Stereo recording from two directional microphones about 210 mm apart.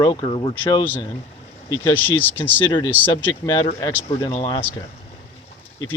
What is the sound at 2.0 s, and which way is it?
Speech, 10° left (ahead or behind).